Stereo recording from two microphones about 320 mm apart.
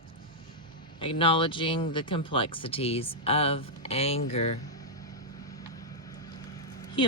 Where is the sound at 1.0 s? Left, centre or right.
Centre.